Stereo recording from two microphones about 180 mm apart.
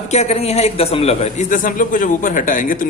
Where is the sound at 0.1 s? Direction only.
40° left (ahead or behind).